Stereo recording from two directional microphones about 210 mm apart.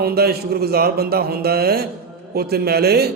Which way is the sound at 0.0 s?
50° right (ahead or behind).